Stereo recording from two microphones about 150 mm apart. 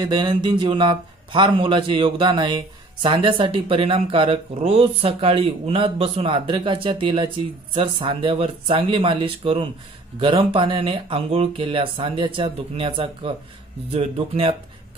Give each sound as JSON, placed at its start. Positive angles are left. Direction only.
{"t": 0.0, "sound": "a man's voice", "side_deg": -30}